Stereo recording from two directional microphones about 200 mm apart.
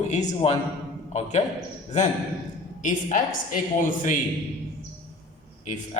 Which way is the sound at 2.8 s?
40° left (ahead or behind).